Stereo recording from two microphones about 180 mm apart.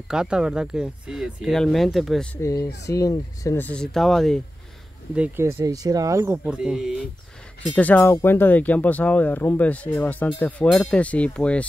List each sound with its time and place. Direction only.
0.1 s speech: 5° right (ahead or behind)
2.3 s speech: 15° left (ahead or behind); by 4.4 s centre (ahead or behind)
5.1 s speech: 10° right (ahead or behind)
6.4 s speech: 5° right (ahead or behind)
7.7 s speech: 10° left (ahead or behind)